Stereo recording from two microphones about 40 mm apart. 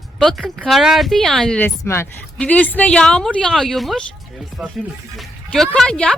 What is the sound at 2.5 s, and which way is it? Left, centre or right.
Speech, left.